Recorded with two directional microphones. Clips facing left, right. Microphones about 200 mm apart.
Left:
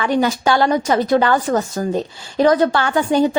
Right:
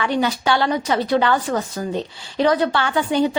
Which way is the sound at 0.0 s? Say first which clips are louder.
Left 3 dB; 45° left (ahead or behind).